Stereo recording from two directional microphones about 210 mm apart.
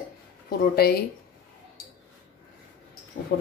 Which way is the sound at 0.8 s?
45° left (ahead or behind).